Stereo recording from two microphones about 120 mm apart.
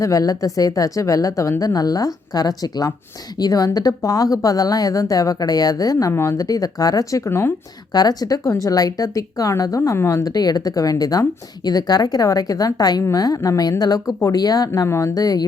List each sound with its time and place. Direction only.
0.0 s a woman's voice: 30° left (ahead or behind)
7.9 s a woman's voice: 35° left (ahead or behind)